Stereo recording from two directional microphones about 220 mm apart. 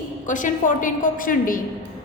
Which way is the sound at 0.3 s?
35° left (ahead or behind).